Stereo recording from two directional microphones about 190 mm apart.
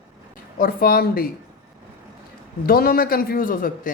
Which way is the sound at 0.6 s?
50° left (ahead or behind).